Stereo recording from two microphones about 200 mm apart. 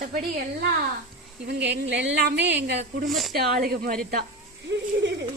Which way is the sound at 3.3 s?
50° right (ahead or behind).